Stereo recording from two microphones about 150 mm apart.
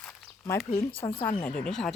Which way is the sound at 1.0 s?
35° left (ahead or behind).